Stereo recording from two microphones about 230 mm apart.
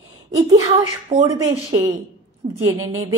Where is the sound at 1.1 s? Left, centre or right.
Right.